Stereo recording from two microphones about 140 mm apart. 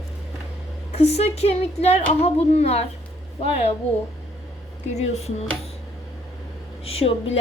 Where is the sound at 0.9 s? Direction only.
50° left (ahead or behind).